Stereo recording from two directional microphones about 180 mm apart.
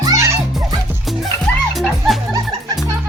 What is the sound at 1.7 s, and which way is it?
Music, centre (ahead or behind).